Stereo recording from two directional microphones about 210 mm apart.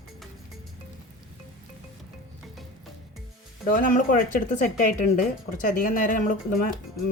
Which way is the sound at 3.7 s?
40° left (ahead or behind).